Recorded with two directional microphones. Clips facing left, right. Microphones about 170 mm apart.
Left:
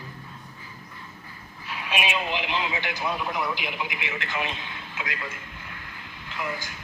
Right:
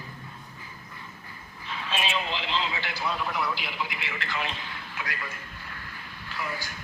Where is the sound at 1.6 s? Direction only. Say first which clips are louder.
Left 2 dB; 10° left (ahead or behind).